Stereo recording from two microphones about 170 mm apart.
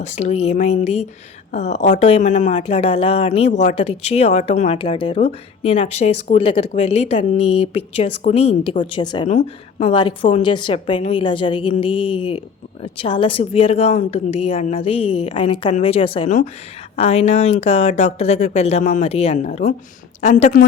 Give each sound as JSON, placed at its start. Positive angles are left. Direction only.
{"t": 0.0, "sound": "a woman's voice", "side_deg": 40}
{"t": 9.2, "sound": "a woman's voice", "side_deg": 45}
{"t": 9.9, "sound": "a woman's voice", "side_deg": 30}